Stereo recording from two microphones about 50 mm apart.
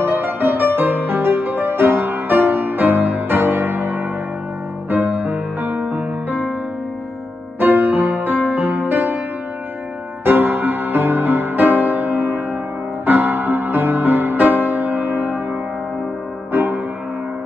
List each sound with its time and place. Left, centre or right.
0.0 s music: right
7.6 s music: right
10.2 s music: right
16.5 s music: right